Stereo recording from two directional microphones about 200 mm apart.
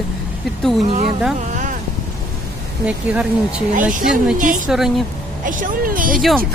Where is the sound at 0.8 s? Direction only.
35° right (ahead or behind).